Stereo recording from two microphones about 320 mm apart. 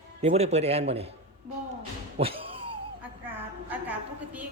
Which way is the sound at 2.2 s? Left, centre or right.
Centre.